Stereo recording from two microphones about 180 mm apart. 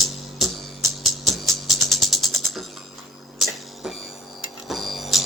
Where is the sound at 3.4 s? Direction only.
Centre (ahead or behind).